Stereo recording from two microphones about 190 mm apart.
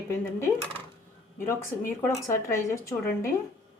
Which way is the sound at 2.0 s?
15° left (ahead or behind).